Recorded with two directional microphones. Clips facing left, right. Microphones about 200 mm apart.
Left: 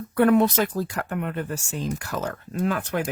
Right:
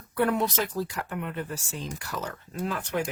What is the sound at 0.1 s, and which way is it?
Speech, 60° left (ahead or behind).